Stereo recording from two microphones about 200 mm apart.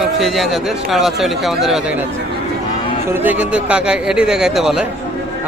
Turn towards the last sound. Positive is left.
turn(degrees=-5)  # may be behind; listen again after turning